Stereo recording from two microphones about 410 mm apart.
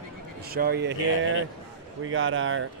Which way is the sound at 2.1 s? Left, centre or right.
Right.